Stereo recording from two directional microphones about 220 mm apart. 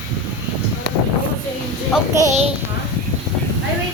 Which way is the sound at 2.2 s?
30° right (ahead or behind).